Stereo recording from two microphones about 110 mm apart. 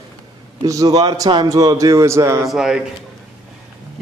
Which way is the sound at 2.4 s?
5° right (ahead or behind).